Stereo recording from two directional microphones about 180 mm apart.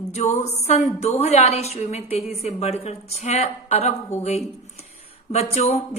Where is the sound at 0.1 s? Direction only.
40° left (ahead or behind).